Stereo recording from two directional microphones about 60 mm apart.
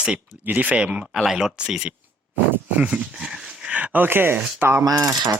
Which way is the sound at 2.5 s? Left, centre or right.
Right.